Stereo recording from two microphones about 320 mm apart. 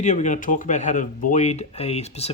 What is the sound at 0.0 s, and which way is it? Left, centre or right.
Speech, left.